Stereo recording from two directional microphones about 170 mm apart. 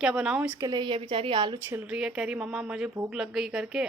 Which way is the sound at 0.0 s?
5° right (ahead or behind).